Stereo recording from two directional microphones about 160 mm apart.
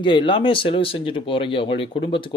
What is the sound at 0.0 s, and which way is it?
Speech, 30° left (ahead or behind).